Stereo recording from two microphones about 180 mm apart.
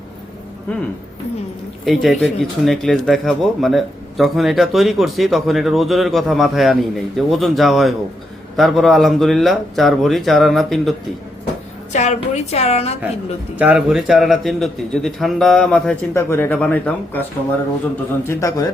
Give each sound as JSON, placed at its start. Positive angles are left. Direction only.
{"t": 1.8, "sound": "speech", "side_deg": 0}
{"t": 11.9, "sound": "a woman's voice", "side_deg": 40}
{"t": 13.6, "sound": "speech", "side_deg": -5}